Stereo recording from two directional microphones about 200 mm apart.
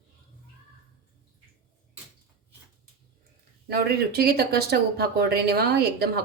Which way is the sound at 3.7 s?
50° right (ahead or behind).